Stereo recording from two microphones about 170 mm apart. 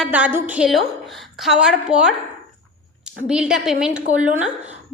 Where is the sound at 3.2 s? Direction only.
5° right (ahead or behind).